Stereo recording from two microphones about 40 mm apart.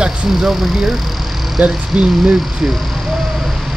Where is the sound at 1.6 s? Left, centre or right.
Right.